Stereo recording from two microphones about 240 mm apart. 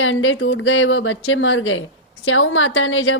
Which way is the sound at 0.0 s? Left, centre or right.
Left.